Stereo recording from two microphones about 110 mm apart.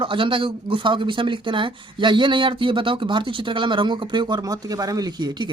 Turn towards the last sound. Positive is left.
turn(degrees=-40)  # may be behind; listen again after turning